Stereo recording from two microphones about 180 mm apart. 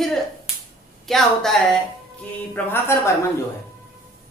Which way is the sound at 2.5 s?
15° left (ahead or behind).